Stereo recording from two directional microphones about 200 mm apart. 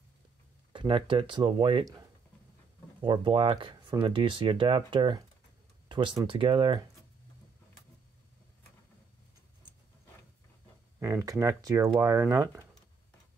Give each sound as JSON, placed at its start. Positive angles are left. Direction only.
{"t": 0.7, "sound": "speech", "side_deg": -25}
{"t": 3.0, "sound": "speech", "side_deg": -25}
{"t": 5.9, "sound": "a sound", "side_deg": -25}
{"t": 6.2, "sound": "speech", "side_deg": -25}
{"t": 11.0, "sound": "speech", "side_deg": -15}